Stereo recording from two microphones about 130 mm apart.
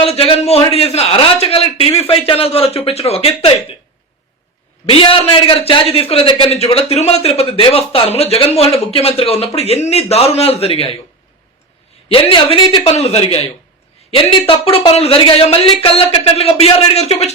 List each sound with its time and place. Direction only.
0.0 s a man's voice: 50° left (ahead or behind)
4.9 s a man's voice: 45° left (ahead or behind)
12.0 s a man's voice: 45° left (ahead or behind)